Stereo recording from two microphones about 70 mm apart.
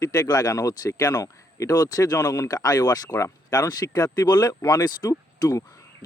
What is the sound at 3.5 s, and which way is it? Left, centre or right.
A man's voice, left.